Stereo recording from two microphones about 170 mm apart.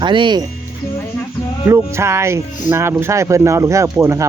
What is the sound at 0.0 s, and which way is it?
Speech, 30° right (ahead or behind).